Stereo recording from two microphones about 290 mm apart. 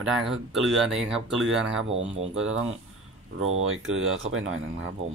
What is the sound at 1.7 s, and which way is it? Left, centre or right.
Speech, right.